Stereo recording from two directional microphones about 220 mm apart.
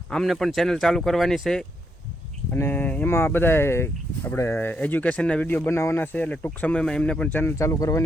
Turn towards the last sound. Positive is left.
turn(degrees=15)  # may be behind; listen again after turning